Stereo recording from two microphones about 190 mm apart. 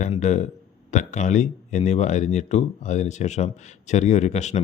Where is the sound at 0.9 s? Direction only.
40° left (ahead or behind).